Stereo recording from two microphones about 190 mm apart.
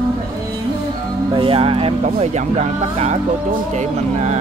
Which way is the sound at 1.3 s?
30° right (ahead or behind).